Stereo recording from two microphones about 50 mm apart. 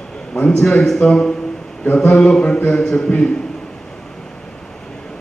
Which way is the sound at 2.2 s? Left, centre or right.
Left.